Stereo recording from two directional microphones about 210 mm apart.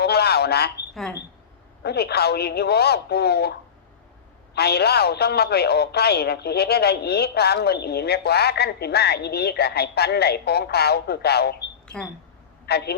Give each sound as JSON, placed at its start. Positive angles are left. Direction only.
{"t": 0.0, "sound": "a sound", "side_deg": 50}
{"t": 1.8, "sound": "speech", "side_deg": 50}
{"t": 4.5, "sound": "speech", "side_deg": 50}
{"t": 11.9, "sound": "speech", "side_deg": 5}
{"t": 12.6, "sound": "a man's voice", "side_deg": 50}